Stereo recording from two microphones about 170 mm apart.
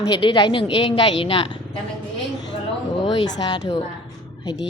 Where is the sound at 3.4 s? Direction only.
25° left (ahead or behind).